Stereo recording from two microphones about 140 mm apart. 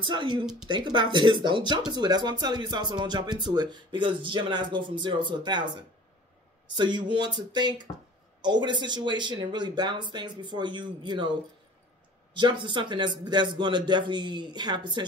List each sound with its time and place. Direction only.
0.0 s speech: 35° right (ahead or behind)
6.7 s speech: 35° right (ahead or behind)
12.4 s speech: 35° right (ahead or behind)